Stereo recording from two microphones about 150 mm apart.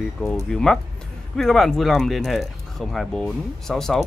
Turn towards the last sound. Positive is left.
turn(degrees=5)  # may be behind; listen again after turning